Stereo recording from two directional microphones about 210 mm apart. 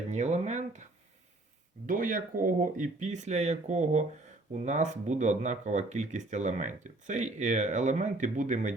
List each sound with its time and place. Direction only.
0.1 s speech: 30° right (ahead or behind)
1.9 s speech: 40° right (ahead or behind)